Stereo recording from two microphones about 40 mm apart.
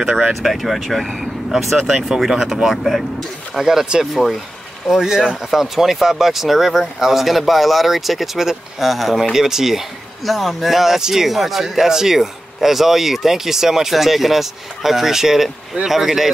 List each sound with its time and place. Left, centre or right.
0.0 s speech: right
0.3 s speech: centre
1.8 s speech: centre
2.7 s speech: centre
3.5 s speech: centre
10.2 s speech: centre